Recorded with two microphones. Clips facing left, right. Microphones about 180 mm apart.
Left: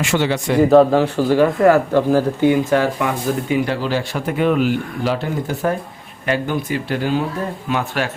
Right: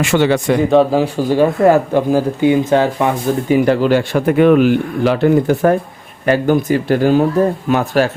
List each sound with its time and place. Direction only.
0.0 s a man's voice: 55° right (ahead or behind)
0.6 s speech: centre (ahead or behind)
0.9 s speech: 10° right (ahead or behind)
3.5 s a man's voice: 50° right (ahead or behind)
6.2 s speech: 45° right (ahead or behind)